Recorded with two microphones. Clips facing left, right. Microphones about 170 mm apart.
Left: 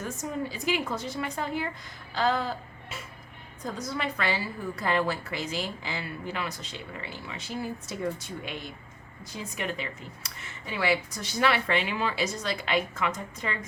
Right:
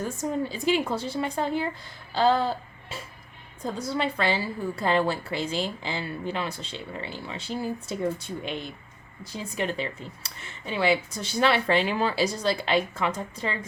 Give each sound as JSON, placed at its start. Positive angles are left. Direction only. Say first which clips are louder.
{"t": 0.0, "sound": "a woman's voice", "louder": "right 4 dB", "side_deg": -30}
{"t": 2.1, "sound": "a sound", "louder": "right 5 dB", "side_deg": -30}
{"t": 3.6, "sound": "a woman's voice", "louder": "right 4 dB", "side_deg": -30}